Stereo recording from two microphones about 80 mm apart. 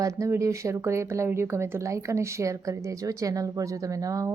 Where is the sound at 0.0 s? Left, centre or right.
Right.